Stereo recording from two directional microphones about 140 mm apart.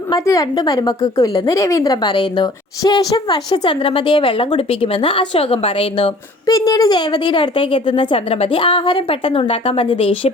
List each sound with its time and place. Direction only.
0.1 s a woman's voice: 25° left (ahead or behind); by 6.1 s 45° left (ahead or behind)
6.4 s a woman's voice: 25° left (ahead or behind); by 10.3 s 40° left (ahead or behind)